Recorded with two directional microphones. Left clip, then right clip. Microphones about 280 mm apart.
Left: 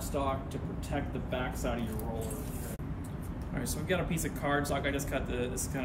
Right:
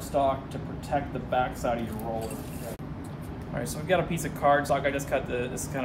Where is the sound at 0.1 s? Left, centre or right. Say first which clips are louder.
Right 9 dB; centre.